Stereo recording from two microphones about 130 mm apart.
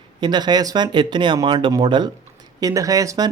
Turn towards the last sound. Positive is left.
turn(degrees=-25)  # may be behind; listen again after turning